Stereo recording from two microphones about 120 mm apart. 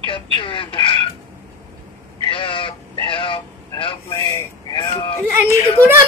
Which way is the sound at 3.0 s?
45° left (ahead or behind).